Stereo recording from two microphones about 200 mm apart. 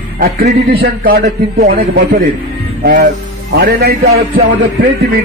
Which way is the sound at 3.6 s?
50° right (ahead or behind).